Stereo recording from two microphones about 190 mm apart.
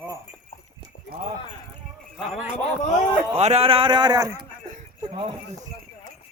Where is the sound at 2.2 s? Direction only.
5° right (ahead or behind).